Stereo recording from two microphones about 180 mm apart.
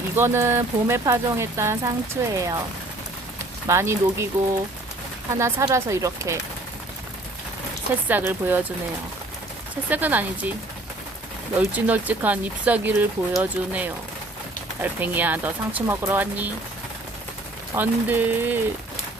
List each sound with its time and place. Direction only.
0.2 s speech: 15° right (ahead or behind)
3.7 s speech: 15° right (ahead or behind)
5.4 s speech: 15° right (ahead or behind)
8.0 s speech: 10° right (ahead or behind)
9.9 s speech: 10° right (ahead or behind)
11.7 s speech: 10° right (ahead or behind)
17.7 s speech: 10° right (ahead or behind)